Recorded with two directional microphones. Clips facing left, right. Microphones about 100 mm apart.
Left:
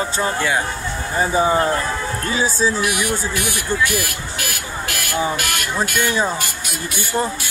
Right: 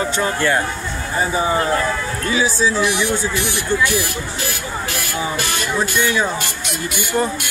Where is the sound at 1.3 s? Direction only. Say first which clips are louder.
Left 2 dB; 30° left (ahead or behind).